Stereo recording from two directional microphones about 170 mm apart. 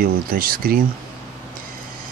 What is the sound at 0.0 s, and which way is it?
Speech, 60° right (ahead or behind).